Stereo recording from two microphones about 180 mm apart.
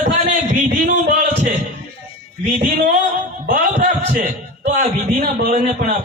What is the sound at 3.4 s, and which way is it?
Speech, 40° right (ahead or behind).